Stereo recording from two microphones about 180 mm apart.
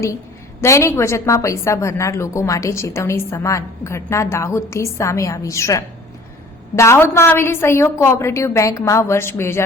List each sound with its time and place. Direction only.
0.6 s a woman's voice: 15° left (ahead or behind)